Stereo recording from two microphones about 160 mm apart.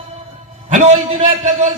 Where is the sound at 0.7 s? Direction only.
50° right (ahead or behind).